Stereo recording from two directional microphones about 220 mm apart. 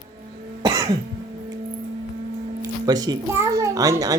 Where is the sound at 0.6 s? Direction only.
15° right (ahead or behind).